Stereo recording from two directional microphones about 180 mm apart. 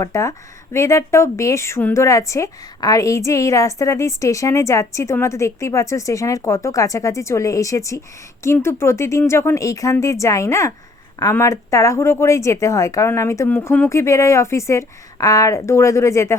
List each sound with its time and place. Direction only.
0.0 s speech: 15° left (ahead or behind)